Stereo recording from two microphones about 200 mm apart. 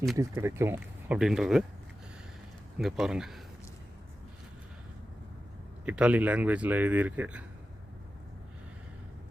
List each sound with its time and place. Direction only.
0.2 s speech: 15° right (ahead or behind)
2.7 s speech: centre (ahead or behind)
5.8 s speech: 5° right (ahead or behind)